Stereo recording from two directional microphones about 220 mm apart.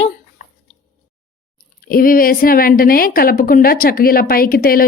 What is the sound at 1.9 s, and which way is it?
A woman's voice, 40° left (ahead or behind).